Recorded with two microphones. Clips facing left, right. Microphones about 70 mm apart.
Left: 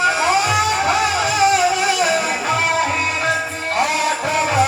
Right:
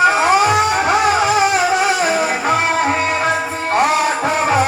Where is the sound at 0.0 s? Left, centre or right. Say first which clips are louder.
Right 4 dB; right.